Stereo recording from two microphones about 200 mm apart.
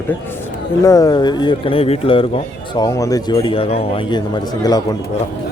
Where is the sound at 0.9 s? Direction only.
20° left (ahead or behind).